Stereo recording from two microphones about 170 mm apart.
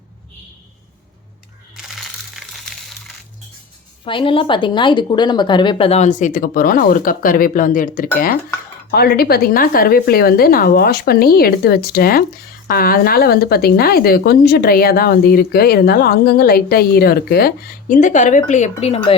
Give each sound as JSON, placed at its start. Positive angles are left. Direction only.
{"t": 4.0, "sound": "a woman's voice", "side_deg": 30}